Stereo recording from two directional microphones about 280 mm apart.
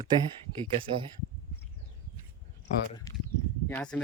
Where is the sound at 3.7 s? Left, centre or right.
Centre.